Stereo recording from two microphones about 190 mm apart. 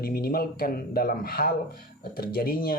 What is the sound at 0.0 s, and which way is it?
Speech, 50° left (ahead or behind).